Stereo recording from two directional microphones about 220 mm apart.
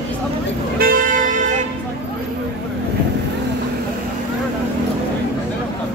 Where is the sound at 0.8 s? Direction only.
35° right (ahead or behind).